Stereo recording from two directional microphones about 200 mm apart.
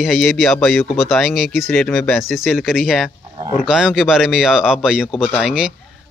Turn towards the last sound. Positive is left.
turn(degrees=-5)  # may be behind; listen again after turning